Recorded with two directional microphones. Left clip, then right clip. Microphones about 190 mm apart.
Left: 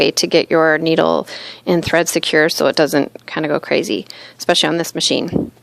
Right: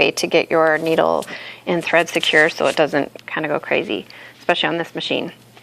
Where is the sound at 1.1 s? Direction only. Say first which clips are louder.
Left 2 dB; 50° left (ahead or behind).